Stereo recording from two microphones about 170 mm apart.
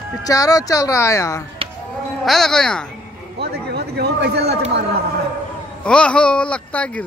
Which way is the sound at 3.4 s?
75° right (ahead or behind).